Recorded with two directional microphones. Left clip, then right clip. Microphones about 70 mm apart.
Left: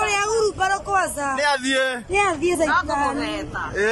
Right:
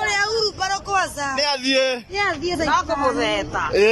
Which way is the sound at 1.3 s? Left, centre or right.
Centre.